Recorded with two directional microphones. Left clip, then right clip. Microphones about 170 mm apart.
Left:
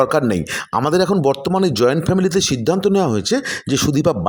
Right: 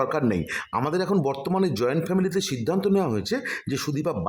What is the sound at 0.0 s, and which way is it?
Speech, 30° left (ahead or behind).